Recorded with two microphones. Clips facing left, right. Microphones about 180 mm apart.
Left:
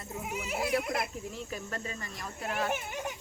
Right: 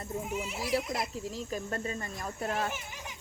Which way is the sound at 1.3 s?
35° right (ahead or behind).